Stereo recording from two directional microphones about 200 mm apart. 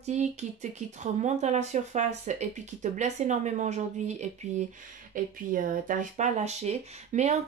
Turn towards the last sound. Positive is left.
turn(degrees=-35)  # may be behind; listen again after turning